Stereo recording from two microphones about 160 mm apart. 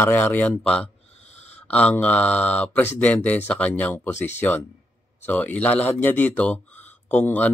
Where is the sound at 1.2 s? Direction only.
45° left (ahead or behind).